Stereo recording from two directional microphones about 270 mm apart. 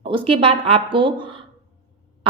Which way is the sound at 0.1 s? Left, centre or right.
Centre.